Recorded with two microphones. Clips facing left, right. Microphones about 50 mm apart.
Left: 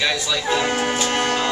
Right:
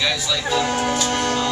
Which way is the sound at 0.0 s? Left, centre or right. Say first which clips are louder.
Left 1 dB; centre.